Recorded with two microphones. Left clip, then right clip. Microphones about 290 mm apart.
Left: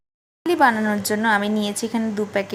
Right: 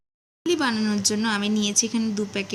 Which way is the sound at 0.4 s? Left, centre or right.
Centre.